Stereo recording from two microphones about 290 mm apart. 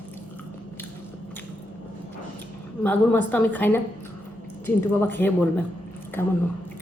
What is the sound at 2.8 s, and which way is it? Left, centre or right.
A woman's voice, centre.